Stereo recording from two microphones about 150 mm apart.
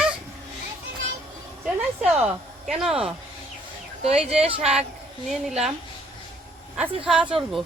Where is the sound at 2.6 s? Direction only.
5° right (ahead or behind).